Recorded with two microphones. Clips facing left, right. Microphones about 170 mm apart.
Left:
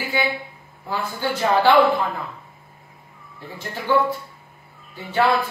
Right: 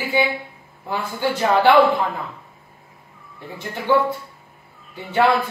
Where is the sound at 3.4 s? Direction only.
20° right (ahead or behind).